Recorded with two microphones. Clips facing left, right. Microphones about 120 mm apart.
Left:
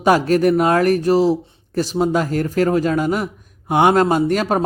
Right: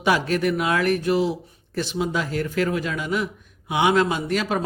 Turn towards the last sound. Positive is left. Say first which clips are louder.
# left 6 dB
turn(degrees=45)  # may be behind; listen again after turning